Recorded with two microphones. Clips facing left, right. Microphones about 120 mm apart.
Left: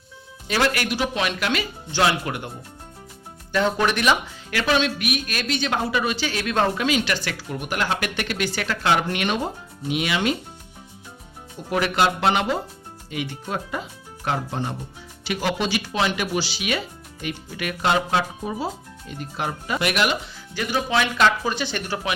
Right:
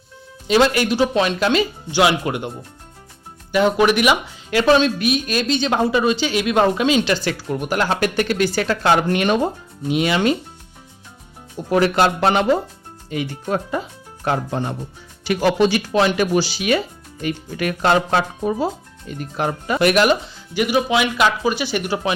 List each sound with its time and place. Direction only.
0.4 s speech: 20° right (ahead or behind)
1.9 s speech: 15° right (ahead or behind)
3.5 s speech: 15° right (ahead or behind)
4.5 s speech: 30° right (ahead or behind)
11.7 s speech: 40° right (ahead or behind)
15.2 s speech: 50° right (ahead or behind)
20.5 s speech: 15° right (ahead or behind)